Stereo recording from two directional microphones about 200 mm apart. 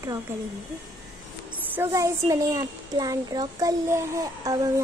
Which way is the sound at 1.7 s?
15° right (ahead or behind).